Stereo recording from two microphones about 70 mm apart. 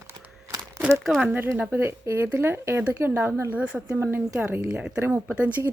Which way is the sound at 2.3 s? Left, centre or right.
Right.